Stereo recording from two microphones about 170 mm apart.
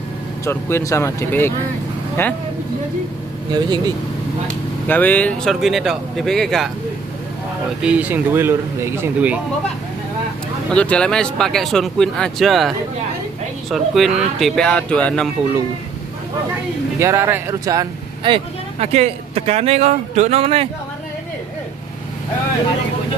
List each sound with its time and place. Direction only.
0.5 s speech: 15° left (ahead or behind)
3.5 s speech: 25° right (ahead or behind)
4.8 s speech: 10° left (ahead or behind)
7.8 s speech: 10° right (ahead or behind)
10.7 s speech: 5° left (ahead or behind)
17.0 s speech: 15° right (ahead or behind)
18.8 s speech: 40° right (ahead or behind)